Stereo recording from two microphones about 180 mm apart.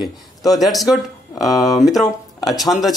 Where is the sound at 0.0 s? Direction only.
20° left (ahead or behind).